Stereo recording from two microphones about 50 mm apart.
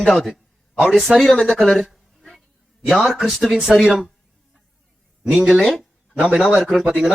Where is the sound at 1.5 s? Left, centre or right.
Centre.